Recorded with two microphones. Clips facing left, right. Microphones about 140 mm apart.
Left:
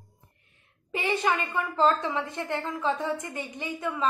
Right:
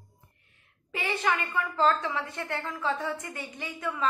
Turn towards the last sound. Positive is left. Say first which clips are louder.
# left 2 dB
turn(degrees=20)  # may be behind; listen again after turning